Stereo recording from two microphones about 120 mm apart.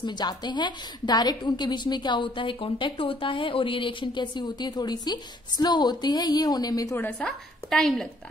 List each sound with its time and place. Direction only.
0.0 s a woman's voice: 35° left (ahead or behind)
7.0 s a woman's voice: 15° left (ahead or behind)
7.2 s a woman's voice: 5° left (ahead or behind)